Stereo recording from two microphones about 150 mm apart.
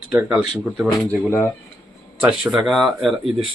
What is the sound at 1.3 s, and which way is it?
Speech, 15° left (ahead or behind).